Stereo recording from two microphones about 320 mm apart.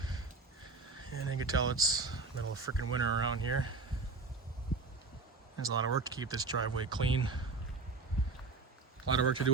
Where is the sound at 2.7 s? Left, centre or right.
Left.